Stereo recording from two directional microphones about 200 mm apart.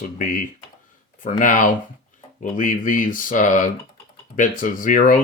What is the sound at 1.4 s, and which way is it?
Speech, 40° left (ahead or behind).